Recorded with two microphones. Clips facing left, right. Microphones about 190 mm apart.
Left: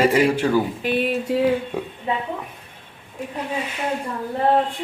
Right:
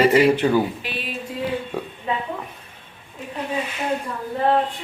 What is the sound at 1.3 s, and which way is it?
Speech, 70° left (ahead or behind).